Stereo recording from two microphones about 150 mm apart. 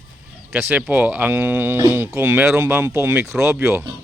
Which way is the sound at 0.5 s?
10° right (ahead or behind).